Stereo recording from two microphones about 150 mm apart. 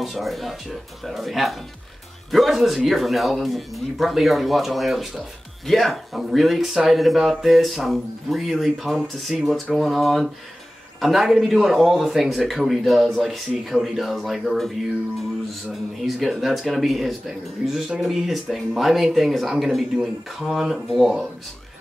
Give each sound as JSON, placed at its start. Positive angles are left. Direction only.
{"t": 0.0, "sound": "speech", "side_deg": 0}
{"t": 15.7, "sound": "speech", "side_deg": 0}